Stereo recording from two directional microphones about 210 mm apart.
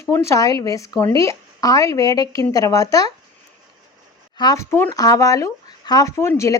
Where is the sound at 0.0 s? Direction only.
15° left (ahead or behind).